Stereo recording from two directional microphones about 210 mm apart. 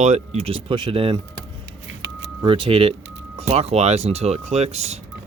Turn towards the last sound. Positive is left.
turn(degrees=-30)  # may be behind; listen again after turning